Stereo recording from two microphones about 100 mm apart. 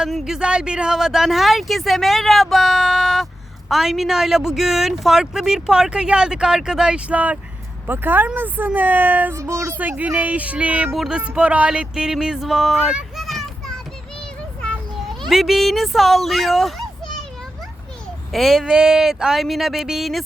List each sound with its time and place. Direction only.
0.0 s speech: 5° right (ahead or behind)
9.4 s speech: 30° right (ahead or behind)
10.0 s speech: 15° right (ahead or behind)
10.9 s music: 5° right (ahead or behind)
14.6 s children playing: 10° left (ahead or behind)
15.3 s speech: 5° right (ahead or behind)
18.3 s speech: centre (ahead or behind)